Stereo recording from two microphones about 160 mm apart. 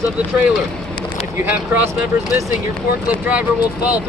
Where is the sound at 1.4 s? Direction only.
10° right (ahead or behind).